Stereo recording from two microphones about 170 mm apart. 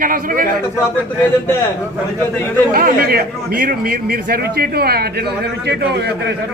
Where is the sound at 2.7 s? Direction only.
60° right (ahead or behind).